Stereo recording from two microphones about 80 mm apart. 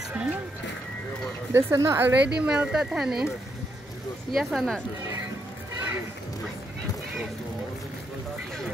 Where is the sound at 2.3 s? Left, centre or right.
Centre.